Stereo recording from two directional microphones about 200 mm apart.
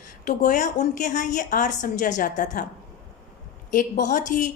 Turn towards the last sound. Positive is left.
turn(degrees=40)  # may be behind; listen again after turning